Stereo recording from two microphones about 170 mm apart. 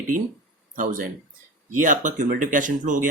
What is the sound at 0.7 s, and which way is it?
Speech, 50° right (ahead or behind).